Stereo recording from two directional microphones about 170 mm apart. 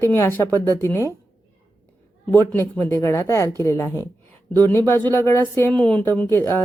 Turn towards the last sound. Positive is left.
turn(degrees=15)  # may be behind; listen again after turning